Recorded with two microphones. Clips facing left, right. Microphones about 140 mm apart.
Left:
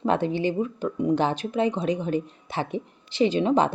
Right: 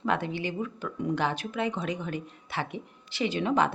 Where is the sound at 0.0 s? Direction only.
25° left (ahead or behind).